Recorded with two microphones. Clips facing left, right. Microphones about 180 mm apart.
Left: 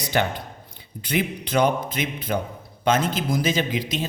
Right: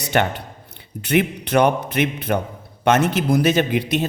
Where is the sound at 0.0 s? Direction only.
65° right (ahead or behind).